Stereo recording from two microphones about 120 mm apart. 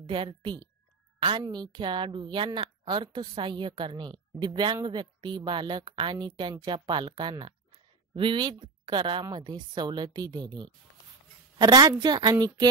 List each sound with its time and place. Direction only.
0.0 s a woman's voice: 45° right (ahead or behind)